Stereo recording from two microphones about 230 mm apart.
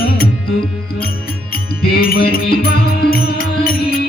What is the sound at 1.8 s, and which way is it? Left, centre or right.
Music, left.